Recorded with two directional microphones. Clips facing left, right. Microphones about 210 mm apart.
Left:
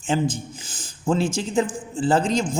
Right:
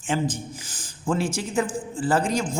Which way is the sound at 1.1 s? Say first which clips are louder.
Left 3 dB; 25° left (ahead or behind).